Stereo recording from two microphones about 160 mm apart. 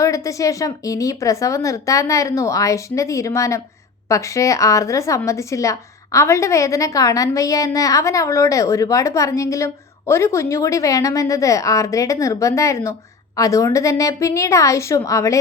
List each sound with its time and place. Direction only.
0.0 s a woman's voice: 20° left (ahead or behind)